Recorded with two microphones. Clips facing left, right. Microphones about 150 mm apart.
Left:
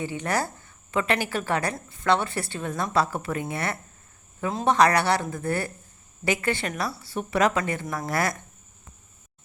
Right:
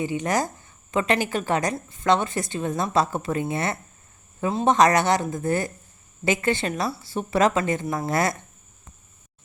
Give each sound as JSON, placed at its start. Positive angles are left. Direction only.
{"t": 0.0, "sound": "a woman's voice", "side_deg": -15}